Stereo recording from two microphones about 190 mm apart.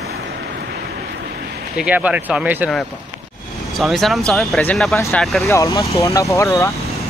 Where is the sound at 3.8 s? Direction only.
Centre (ahead or behind).